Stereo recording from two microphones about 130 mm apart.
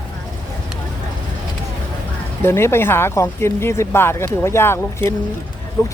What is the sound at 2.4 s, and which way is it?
Speech, 20° left (ahead or behind).